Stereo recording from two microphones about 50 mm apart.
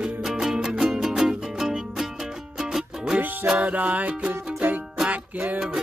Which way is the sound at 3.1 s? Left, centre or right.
Right.